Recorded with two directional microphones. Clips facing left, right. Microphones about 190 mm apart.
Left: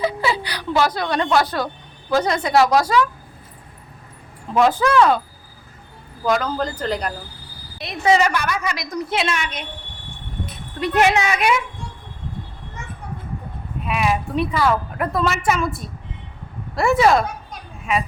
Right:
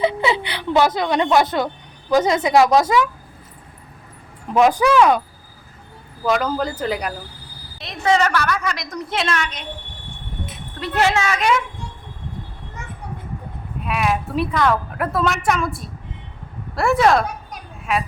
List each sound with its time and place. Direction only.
0.1 s a woman's voice: 20° right (ahead or behind)
4.5 s speech: 15° right (ahead or behind)
6.2 s speech: 5° right (ahead or behind)
7.8 s a woman's voice: 10° left (ahead or behind)
10.8 s a woman's voice: 15° left (ahead or behind)
13.8 s a woman's voice: centre (ahead or behind)